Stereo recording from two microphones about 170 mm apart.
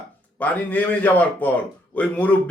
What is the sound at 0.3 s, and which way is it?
A man's voice, 10° left (ahead or behind).